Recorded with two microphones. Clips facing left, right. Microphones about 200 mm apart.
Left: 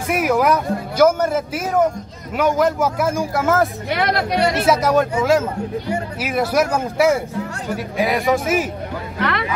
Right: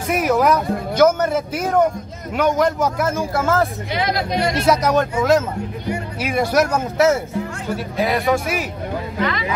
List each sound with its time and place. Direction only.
0.1 s a man's voice: 5° left (ahead or behind)
3.9 s a woman's voice: 60° left (ahead or behind)
4.6 s a man's voice: 5° left (ahead or behind)
9.2 s a woman's voice: 60° left (ahead or behind)